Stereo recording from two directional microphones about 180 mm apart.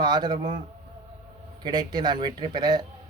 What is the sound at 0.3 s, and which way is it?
Speech, 40° right (ahead or behind).